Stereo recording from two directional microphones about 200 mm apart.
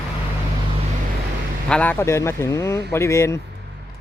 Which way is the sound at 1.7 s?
5° left (ahead or behind).